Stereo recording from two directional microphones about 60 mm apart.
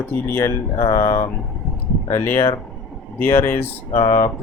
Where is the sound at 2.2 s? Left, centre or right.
Left.